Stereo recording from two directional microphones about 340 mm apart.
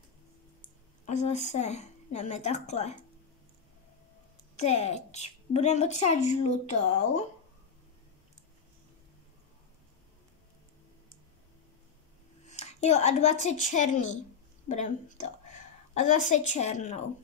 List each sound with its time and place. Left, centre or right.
1.0 s a woman's voice: left
4.6 s a woman's voice: centre
12.4 s a woman's voice: centre